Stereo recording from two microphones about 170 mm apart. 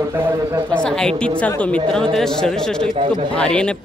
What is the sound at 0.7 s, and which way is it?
A man's voice, 5° left (ahead or behind).